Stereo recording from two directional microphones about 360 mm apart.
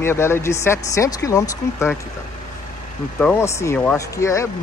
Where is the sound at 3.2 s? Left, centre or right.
Centre.